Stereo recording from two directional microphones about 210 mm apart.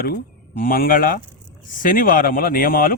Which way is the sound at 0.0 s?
45° left (ahead or behind).